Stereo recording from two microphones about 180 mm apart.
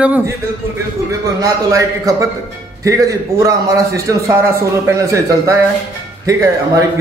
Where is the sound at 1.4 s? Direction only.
20° right (ahead or behind).